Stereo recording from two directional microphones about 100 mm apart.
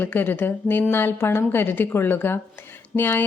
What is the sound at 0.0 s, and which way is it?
A woman's voice, 20° left (ahead or behind).